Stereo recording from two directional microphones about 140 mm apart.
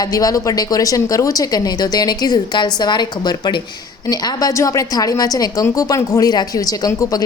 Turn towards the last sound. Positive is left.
turn(degrees=25)  # may be behind; listen again after turning